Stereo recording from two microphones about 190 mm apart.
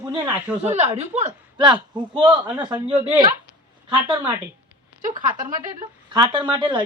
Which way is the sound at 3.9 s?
25° right (ahead or behind).